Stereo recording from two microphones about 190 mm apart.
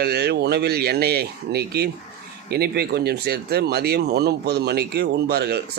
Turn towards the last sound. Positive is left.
turn(degrees=-60)  # may be behind; listen again after turning